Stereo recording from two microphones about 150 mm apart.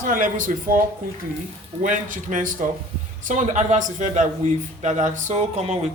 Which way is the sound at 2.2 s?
60° right (ahead or behind).